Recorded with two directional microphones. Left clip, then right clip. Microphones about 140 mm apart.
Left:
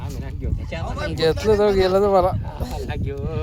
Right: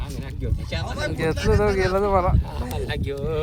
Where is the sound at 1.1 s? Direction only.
40° left (ahead or behind).